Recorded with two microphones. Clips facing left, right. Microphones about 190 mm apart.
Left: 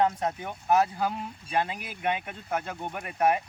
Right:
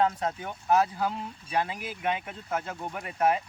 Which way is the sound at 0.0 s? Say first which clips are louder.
Left 1 dB; 15° left (ahead or behind).